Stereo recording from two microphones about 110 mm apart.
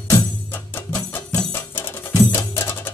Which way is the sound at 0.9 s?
20° left (ahead or behind).